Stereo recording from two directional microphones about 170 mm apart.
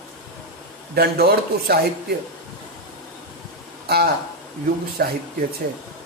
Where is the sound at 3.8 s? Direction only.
65° right (ahead or behind).